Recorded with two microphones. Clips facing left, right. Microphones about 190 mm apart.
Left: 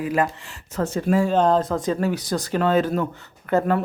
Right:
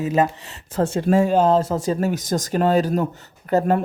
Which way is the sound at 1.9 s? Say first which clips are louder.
Right 2 dB; 45° right (ahead or behind).